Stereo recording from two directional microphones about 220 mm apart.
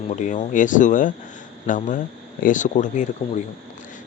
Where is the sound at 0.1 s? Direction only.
35° left (ahead or behind).